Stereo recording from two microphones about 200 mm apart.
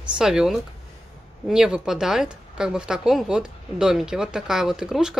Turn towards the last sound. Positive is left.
turn(degrees=-5)  # may be behind; listen again after turning